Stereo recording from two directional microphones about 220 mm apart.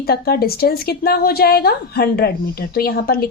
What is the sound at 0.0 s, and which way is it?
A woman's voice, 45° left (ahead or behind).